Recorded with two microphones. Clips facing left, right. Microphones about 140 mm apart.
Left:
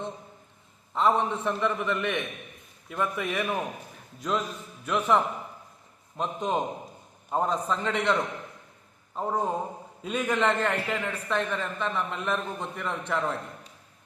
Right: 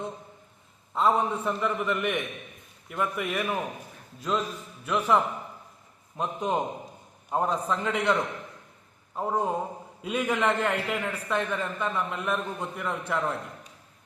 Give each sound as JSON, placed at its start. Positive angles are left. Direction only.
{"t": 0.9, "sound": "a man's voice", "side_deg": -10}
{"t": 9.1, "sound": "a man's voice", "side_deg": -10}